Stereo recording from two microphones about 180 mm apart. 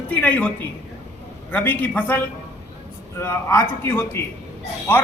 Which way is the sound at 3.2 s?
15° left (ahead or behind).